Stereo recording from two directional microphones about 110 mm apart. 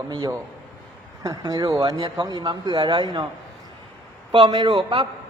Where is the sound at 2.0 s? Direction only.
50° right (ahead or behind).